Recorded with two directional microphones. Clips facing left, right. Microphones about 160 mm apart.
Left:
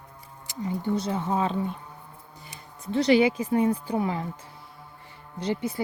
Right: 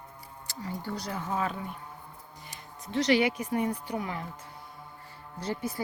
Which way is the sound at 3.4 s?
30° left (ahead or behind).